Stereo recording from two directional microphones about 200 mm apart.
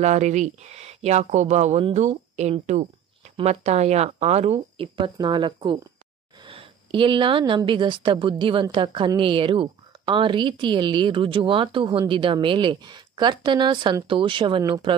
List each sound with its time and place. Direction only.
0.0 s speech: 35° right (ahead or behind)